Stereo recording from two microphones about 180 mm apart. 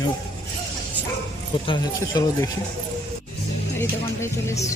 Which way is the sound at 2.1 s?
20° left (ahead or behind).